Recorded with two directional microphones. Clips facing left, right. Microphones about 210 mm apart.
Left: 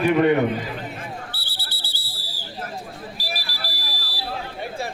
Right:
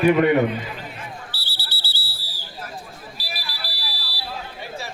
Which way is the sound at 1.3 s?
55° left (ahead or behind).